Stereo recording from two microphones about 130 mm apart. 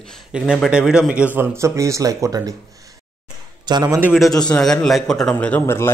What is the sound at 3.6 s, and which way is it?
Speech, 30° right (ahead or behind).